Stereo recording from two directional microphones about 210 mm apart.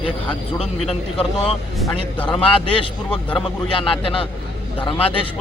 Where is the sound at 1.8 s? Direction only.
15° left (ahead or behind).